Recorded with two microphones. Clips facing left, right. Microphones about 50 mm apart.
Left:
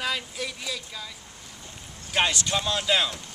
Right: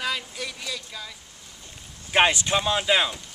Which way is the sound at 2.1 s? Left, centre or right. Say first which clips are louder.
Right 5 dB; right.